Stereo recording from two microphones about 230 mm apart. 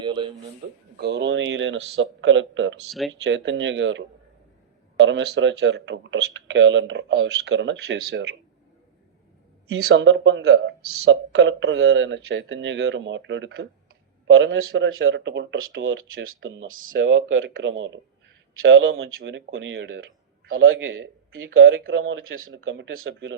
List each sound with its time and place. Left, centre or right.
0.0 s a sound: right
0.9 s speech: right
9.9 s speech: right